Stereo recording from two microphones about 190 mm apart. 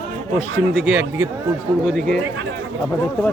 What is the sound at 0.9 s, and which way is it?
A man's voice, 5° right (ahead or behind).